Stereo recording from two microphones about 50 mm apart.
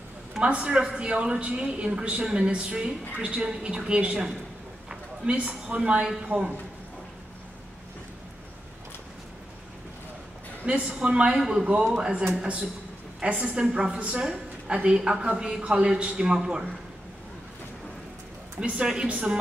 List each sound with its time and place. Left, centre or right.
0.4 s a woman's voice: right
10.6 s a woman's voice: right
15.0 s a man's voice: centre
18.6 s a man's voice: centre